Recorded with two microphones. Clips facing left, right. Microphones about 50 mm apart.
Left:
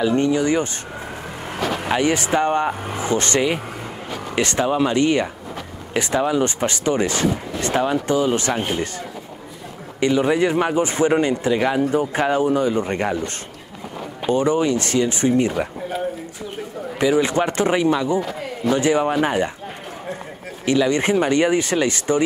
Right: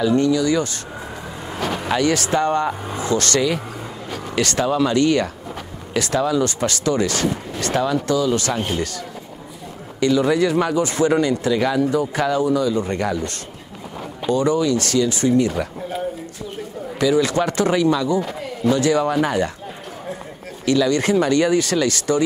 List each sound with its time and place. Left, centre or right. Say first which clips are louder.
0.0 s speech: right 1 dB; left
1.8 s speech: right 1 dB; left
17.0 s speech: even; left
20.6 s speech: even; left